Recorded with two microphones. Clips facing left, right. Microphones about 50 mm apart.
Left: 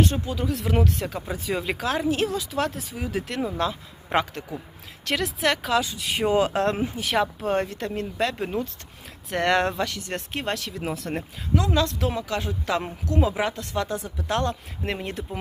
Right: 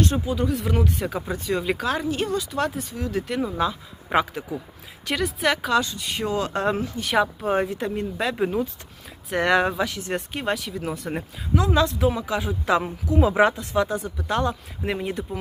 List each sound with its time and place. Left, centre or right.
0.0 s speech: centre
13.3 s speech: right
13.6 s speech: centre